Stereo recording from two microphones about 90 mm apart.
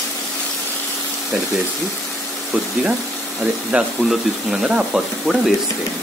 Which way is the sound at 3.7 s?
10° right (ahead or behind).